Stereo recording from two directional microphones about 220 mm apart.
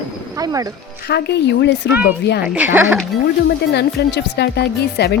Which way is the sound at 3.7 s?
50° left (ahead or behind).